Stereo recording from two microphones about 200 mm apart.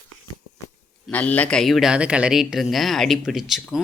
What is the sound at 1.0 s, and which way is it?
Speech, 5° left (ahead or behind).